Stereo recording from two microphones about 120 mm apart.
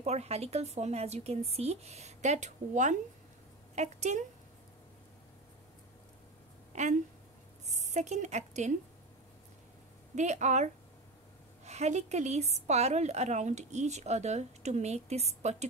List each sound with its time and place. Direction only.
0.0 s a woman's voice: 65° right (ahead or behind); by 3.0 s 90° right
3.7 s a woman's voice: 75° right (ahead or behind)
6.7 s a sound: 75° right (ahead or behind)
7.6 s a woman's voice: 75° right (ahead or behind)
10.1 s a woman's voice: 75° right (ahead or behind)